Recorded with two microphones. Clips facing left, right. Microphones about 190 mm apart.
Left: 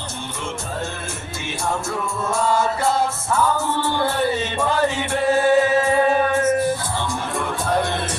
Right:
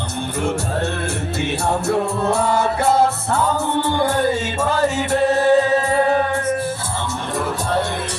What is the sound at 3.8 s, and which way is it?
Music, 15° right (ahead or behind).